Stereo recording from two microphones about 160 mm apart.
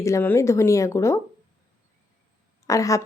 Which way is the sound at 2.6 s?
20° left (ahead or behind).